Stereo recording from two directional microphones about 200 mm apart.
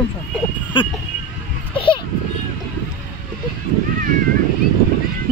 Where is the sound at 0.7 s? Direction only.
25° left (ahead or behind).